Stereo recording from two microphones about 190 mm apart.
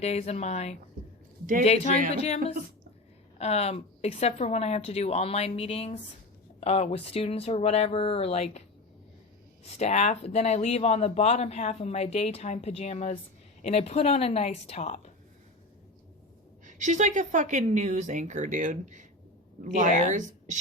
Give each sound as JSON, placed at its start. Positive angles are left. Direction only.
{"t": 0.0, "sound": "speech", "side_deg": 35}
{"t": 9.7, "sound": "speech", "side_deg": 35}
{"t": 16.6, "sound": "a woman's voice", "side_deg": -40}